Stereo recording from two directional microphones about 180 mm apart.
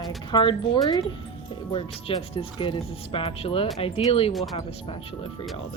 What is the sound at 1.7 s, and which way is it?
Speech, 30° left (ahead or behind).